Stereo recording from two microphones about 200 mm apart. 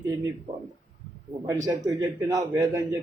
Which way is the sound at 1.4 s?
15° right (ahead or behind).